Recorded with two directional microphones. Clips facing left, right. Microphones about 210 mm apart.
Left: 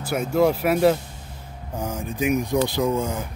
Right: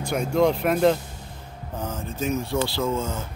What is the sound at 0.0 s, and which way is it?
Speech, 5° left (ahead or behind).